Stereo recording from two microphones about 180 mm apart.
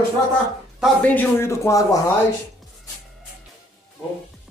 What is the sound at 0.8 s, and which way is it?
A man's voice, 10° left (ahead or behind).